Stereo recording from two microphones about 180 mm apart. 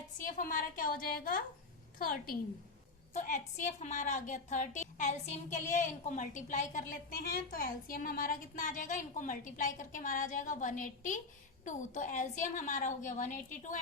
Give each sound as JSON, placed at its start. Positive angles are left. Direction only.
{"t": 0.3, "sound": "a woman's voice", "side_deg": 50}
{"t": 3.1, "sound": "a woman's voice", "side_deg": 45}